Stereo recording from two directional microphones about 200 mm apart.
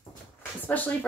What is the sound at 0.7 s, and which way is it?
Speech, 10° left (ahead or behind).